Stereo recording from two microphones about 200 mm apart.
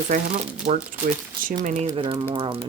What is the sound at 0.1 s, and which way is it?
Speech, 40° right (ahead or behind).